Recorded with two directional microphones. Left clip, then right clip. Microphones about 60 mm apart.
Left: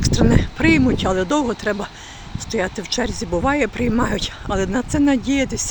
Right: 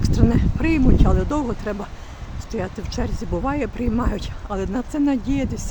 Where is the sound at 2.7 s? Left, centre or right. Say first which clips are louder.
Left 6 dB; left.